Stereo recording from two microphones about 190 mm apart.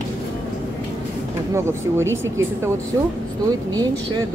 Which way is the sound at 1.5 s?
15° right (ahead or behind).